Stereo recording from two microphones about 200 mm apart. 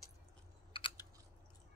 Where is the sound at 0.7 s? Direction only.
25° left (ahead or behind).